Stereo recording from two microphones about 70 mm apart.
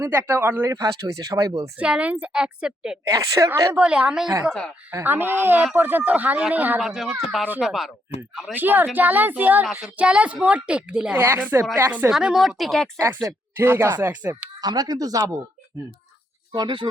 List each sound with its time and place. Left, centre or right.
0.0 s speech: right
0.6 s speech: right
1.8 s a woman's voice: centre
3.1 s speech: right
3.8 s a woman's voice: centre
5.0 s speech: right
6.8 s speech: centre
8.5 s a woman's voice: right
11.2 s speech: right
12.1 s speech: centre
13.3 s speech: right
14.6 s speech: right